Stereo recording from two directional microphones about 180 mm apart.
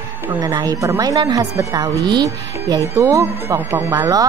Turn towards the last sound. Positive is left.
turn(degrees=-15)  # may be behind; listen again after turning